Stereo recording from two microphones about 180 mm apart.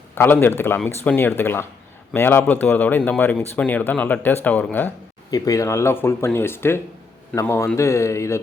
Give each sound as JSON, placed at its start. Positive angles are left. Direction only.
{"t": 0.1, "sound": "speech", "side_deg": 10}